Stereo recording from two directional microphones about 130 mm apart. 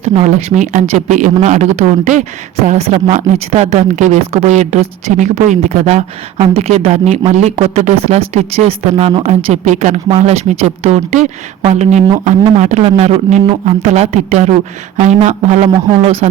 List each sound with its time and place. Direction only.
0.0 s speech: 60° right (ahead or behind)
2.6 s speech: 55° right (ahead or behind)
9.2 s speech: 65° right (ahead or behind)
10.1 s speech: 55° right (ahead or behind)